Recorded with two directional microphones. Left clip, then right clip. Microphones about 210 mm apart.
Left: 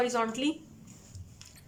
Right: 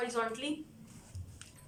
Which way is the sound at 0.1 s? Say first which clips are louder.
Left 5 dB; 40° left (ahead or behind).